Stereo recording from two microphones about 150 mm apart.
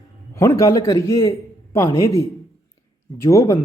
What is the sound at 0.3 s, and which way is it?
Speech, 20° left (ahead or behind).